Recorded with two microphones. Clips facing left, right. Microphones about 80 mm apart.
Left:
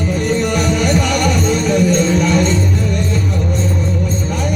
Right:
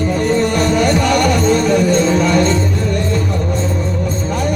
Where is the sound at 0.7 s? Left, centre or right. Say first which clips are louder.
Right 2 dB; right.